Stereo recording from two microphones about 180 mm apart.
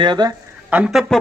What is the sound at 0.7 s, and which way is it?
Speech, 5° right (ahead or behind).